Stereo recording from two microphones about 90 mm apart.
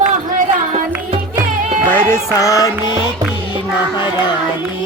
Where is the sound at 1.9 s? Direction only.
30° left (ahead or behind).